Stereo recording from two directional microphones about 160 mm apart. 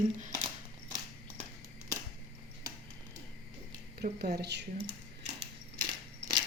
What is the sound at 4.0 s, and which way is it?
Speech, 80° right.